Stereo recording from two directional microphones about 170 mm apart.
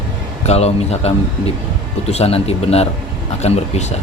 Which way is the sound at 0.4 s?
40° left (ahead or behind).